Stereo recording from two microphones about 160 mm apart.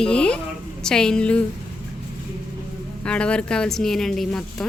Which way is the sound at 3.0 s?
5° left (ahead or behind).